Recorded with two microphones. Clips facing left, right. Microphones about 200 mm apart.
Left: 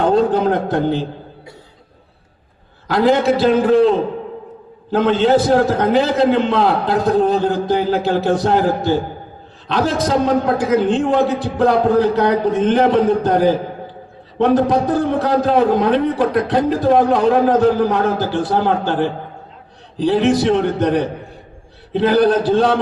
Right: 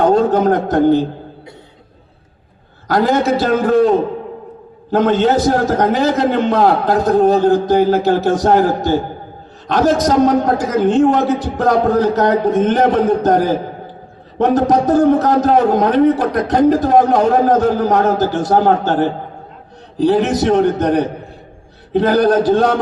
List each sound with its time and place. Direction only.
0.0 s a man's voice: 45° right (ahead or behind)
2.8 s a man's voice: 45° right (ahead or behind)